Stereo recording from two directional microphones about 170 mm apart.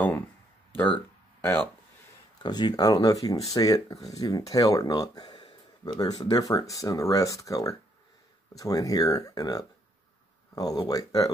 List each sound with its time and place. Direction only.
1.4 s speech: 10° left (ahead or behind)
2.4 s speech: 25° left (ahead or behind)